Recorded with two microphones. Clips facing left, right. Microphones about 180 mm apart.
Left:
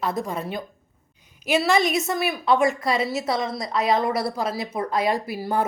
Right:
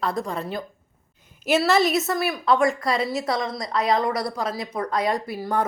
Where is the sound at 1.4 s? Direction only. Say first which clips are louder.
Right 1 dB; 10° left (ahead or behind).